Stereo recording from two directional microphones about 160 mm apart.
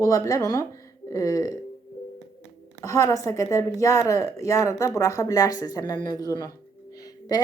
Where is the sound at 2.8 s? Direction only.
20° left (ahead or behind).